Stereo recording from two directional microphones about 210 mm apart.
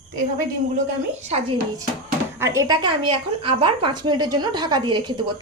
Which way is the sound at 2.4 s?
15° right (ahead or behind).